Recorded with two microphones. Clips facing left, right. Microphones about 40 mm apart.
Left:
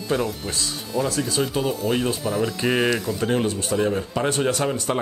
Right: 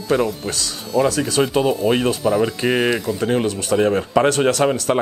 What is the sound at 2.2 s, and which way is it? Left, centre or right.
Speech, centre.